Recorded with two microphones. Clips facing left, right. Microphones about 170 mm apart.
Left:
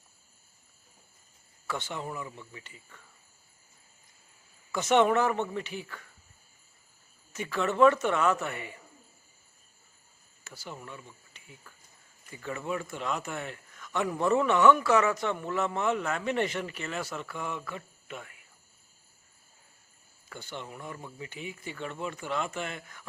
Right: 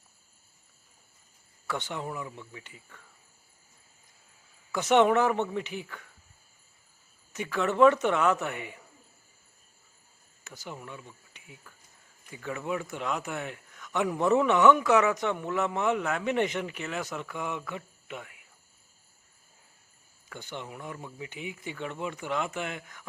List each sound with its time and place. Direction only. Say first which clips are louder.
2.0 s a man's voice: right 1 dB; centre (ahead or behind)
4.7 s speech: right 2 dB; 15° right (ahead or behind)
7.3 s speech: right 1 dB; 10° right (ahead or behind)
10.4 s a man's voice: right 1 dB; 15° right (ahead or behind)
14.7 s speech: right 1 dB; 15° right (ahead or behind)
17.7 s cricket: right 2 dB; 15° right (ahead or behind)
20.3 s speech: right 1 dB; 15° right (ahead or behind)